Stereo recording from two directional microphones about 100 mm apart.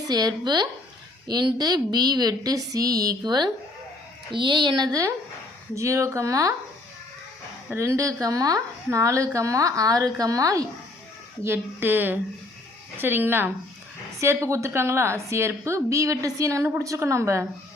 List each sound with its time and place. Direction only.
0.1 s a woman's voice: 40° right (ahead or behind)
7.8 s a woman's voice: 30° right (ahead or behind)
11.4 s a woman's voice: 25° right (ahead or behind)